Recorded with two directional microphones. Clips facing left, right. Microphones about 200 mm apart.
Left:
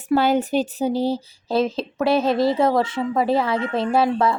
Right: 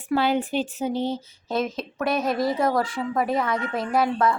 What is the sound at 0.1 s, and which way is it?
Speech, 40° left (ahead or behind).